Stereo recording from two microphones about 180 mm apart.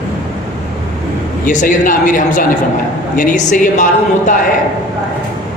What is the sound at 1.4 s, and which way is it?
A woman's voice, 45° left (ahead or behind).